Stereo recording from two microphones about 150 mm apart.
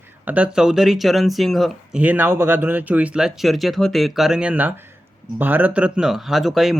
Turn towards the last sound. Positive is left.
turn(degrees=0)  # may be behind; listen again after turning